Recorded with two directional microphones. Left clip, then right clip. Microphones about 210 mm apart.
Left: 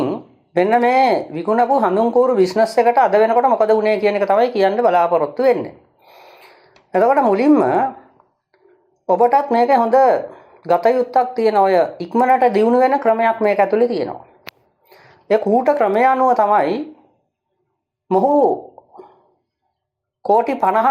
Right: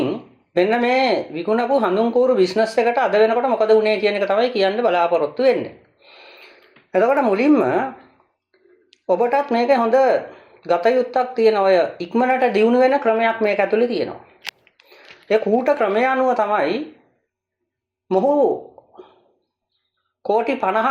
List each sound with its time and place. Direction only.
0.1 s speech: 25° left (ahead or behind)
6.0 s a sound: 30° left (ahead or behind)
6.9 s speech: 25° left (ahead or behind)
9.0 s speech: 25° left (ahead or behind)
18.1 s speech: 25° left (ahead or behind)
20.2 s speech: 30° left (ahead or behind)